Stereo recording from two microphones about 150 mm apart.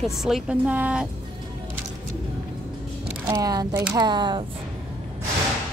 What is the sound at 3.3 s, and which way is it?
Speech, 25° right (ahead or behind).